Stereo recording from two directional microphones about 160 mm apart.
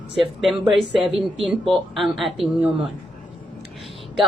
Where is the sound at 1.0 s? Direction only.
35° right (ahead or behind).